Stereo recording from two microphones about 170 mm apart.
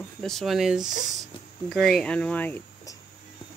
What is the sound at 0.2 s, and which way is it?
Speech, centre (ahead or behind).